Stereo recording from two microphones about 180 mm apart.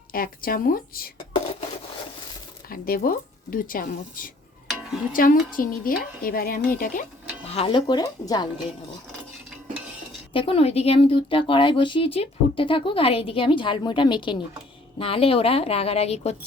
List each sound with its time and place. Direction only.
0.1 s speech: 55° left (ahead or behind)
2.6 s speech: 55° left (ahead or behind)
4.7 s music: centre (ahead or behind)
5.1 s speech: 50° left (ahead or behind)
7.5 s speech: 30° left (ahead or behind)
10.3 s a woman's voice: 30° left (ahead or behind)